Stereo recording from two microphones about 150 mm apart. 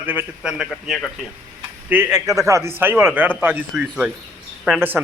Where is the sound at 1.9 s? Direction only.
10° right (ahead or behind).